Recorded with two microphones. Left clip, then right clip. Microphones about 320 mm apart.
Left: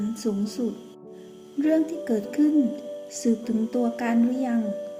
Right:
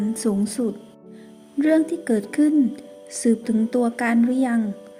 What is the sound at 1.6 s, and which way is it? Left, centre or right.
A woman's voice, right.